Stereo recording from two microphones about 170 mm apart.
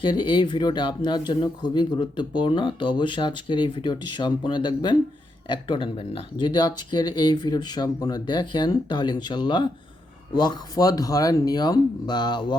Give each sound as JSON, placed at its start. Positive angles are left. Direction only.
{"t": 0.0, "sound": "speech", "side_deg": 25}